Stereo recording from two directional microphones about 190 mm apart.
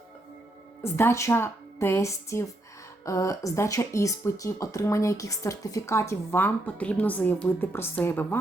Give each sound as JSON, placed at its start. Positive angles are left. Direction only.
{"t": 0.8, "sound": "speech", "side_deg": 15}